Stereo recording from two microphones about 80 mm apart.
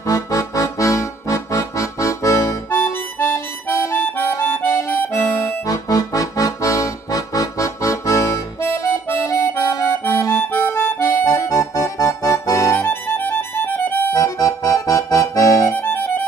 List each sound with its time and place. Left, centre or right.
0.0 s accordion: left
2.7 s harmonica: left
5.4 s accordion: left
10.5 s accordion: left
14.1 s accordion: left
15.7 s music: left